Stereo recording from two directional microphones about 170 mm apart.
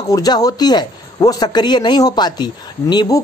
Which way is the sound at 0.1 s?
20° left (ahead or behind).